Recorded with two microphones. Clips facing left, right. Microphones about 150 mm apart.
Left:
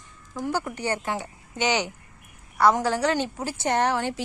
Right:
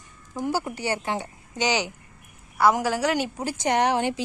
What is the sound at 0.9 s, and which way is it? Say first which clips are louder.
Speech: right 1 dB; 25° right (ahead or behind).